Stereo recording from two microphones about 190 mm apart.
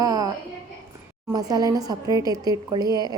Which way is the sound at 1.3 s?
20° right (ahead or behind).